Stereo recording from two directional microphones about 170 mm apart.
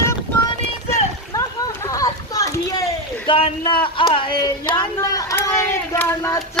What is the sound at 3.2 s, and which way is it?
Speech, 30° left (ahead or behind).